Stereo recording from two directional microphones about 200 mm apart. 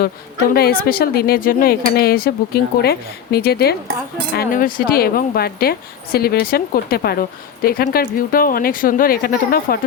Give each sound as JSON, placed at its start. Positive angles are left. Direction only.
{"t": 0.5, "sound": "a woman's voice", "side_deg": 50}